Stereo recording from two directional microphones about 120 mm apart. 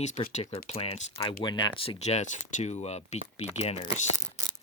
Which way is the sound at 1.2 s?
40° left (ahead or behind).